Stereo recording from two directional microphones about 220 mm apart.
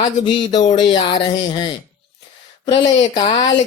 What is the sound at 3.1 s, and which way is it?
Speech, 20° left (ahead or behind).